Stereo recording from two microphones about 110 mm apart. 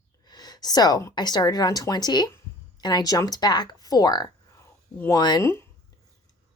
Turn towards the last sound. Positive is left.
turn(degrees=25)  # may be behind; listen again after turning